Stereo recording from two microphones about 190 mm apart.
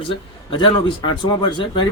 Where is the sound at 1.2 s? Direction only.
25° left (ahead or behind).